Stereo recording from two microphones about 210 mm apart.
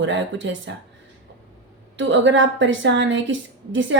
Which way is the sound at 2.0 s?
60° right (ahead or behind).